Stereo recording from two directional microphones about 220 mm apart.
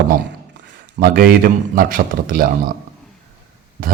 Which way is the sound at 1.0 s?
40° right (ahead or behind).